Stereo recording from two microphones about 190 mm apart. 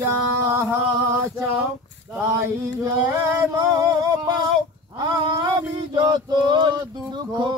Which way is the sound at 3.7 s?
20° right (ahead or behind).